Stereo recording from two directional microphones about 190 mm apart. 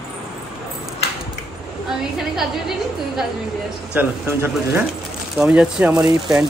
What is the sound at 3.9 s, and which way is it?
Speech, 10° right (ahead or behind).